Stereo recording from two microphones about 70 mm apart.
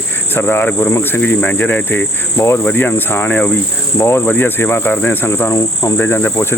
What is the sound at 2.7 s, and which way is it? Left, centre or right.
Speech, left.